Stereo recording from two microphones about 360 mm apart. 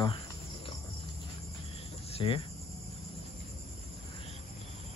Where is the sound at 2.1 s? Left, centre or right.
Centre.